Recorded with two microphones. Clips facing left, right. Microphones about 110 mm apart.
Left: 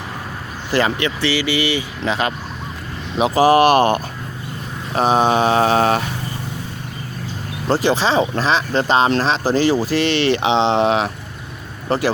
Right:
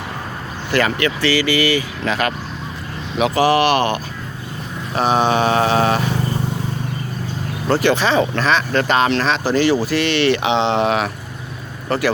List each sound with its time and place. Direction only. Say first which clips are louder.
0.9 s speech: right 1 dB; 20° left (ahead or behind)
3.2 s speech: left 2 dB; 30° left (ahead or behind)
7.7 s speech: right 1 dB; 30° left (ahead or behind)